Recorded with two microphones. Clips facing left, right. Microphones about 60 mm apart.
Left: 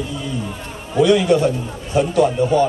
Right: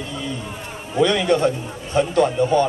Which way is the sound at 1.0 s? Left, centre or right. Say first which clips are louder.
Left 4 dB; centre.